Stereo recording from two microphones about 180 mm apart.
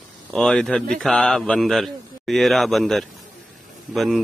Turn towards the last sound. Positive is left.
turn(degrees=0)  # may be behind; listen again after turning